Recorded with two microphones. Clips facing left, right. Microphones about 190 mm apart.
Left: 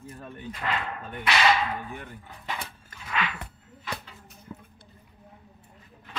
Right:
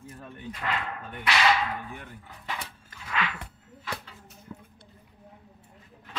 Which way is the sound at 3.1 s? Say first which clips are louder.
Left 1 dB; 20° left (ahead or behind).